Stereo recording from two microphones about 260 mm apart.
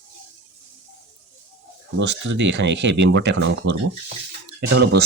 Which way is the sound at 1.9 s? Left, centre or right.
Right.